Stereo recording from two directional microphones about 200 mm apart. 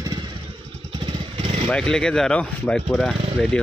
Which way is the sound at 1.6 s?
5° left (ahead or behind).